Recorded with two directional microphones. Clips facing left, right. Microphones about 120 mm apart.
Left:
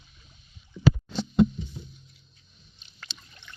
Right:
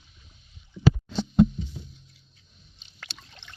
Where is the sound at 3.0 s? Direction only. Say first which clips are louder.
Right 1 dB; 90° right.